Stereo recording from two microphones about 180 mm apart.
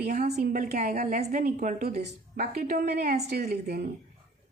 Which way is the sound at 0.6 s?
45° right (ahead or behind).